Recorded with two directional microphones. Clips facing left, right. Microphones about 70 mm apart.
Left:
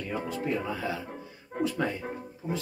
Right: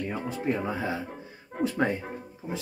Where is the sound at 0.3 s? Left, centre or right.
Right.